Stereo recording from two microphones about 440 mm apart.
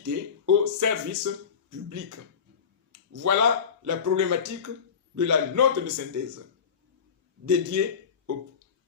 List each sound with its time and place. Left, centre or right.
0.0 s a sound: right
1.9 s speech: right
7.4 s speech: right